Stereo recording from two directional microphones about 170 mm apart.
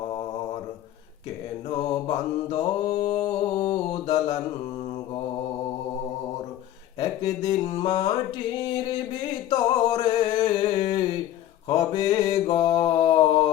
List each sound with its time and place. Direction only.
1.7 s mantra: 25° left (ahead or behind)
7.0 s speech: 25° left (ahead or behind)
9.5 s a sound: 25° left (ahead or behind)
11.7 s mantra: 20° left (ahead or behind)